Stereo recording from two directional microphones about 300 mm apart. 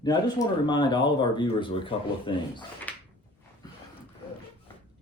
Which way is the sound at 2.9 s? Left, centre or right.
Centre.